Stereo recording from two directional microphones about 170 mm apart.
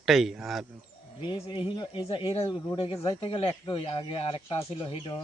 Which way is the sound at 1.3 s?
30° left (ahead or behind).